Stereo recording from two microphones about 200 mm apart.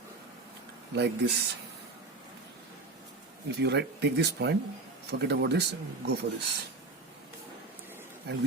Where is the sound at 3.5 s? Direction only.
55° right (ahead or behind).